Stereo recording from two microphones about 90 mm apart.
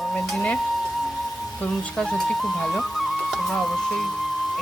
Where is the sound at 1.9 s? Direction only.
5° left (ahead or behind).